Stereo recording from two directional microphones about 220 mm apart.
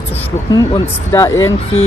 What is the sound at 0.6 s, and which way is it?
Speech, 15° left (ahead or behind).